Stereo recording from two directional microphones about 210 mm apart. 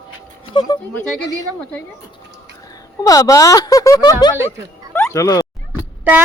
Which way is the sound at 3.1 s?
15° left (ahead or behind).